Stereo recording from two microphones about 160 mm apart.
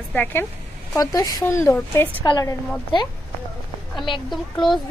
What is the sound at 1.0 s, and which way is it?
A woman's voice, 20° left (ahead or behind).